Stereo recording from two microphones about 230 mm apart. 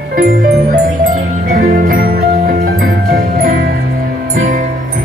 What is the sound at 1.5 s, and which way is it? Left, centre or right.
Music, right.